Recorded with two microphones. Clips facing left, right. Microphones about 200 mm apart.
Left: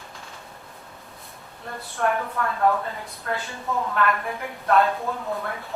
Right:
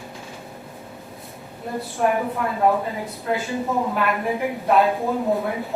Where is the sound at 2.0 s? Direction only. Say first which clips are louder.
Right 3 dB; 15° right (ahead or behind).